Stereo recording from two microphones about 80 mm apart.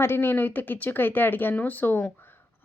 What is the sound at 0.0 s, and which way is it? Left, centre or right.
Speech, left.